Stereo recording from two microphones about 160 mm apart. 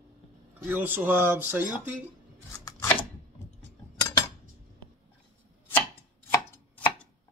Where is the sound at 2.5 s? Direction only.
20° left (ahead or behind).